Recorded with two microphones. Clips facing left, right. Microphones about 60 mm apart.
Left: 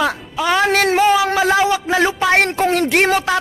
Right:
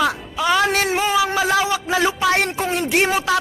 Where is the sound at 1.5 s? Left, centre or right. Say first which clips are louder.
Left 3 dB; left.